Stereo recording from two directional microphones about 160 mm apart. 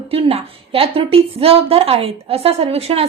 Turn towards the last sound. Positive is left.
turn(degrees=-40)  # may be behind; listen again after turning